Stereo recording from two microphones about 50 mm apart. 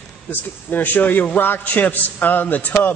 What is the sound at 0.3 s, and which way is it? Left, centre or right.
A man's voice, left.